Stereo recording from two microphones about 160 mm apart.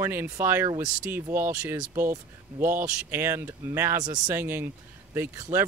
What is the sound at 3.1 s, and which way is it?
Speech, 15° right (ahead or behind).